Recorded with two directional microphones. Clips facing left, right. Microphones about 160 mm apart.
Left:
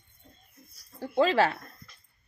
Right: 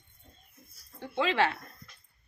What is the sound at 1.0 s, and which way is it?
Speech, 40° left (ahead or behind).